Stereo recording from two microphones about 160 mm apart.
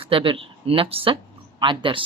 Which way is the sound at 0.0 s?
35° right (ahead or behind).